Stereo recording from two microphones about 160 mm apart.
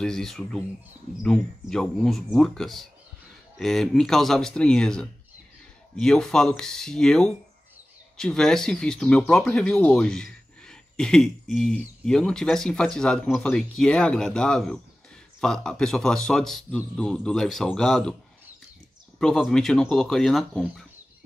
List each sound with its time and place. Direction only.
0.0 s speech: 5° left (ahead or behind)
19.1 s speech: centre (ahead or behind)